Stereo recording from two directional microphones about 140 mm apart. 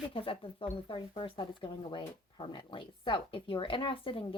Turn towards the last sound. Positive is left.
turn(degrees=40)  # may be behind; listen again after turning